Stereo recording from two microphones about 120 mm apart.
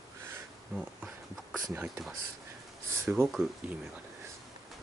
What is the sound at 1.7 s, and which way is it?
Speech, 5° right (ahead or behind).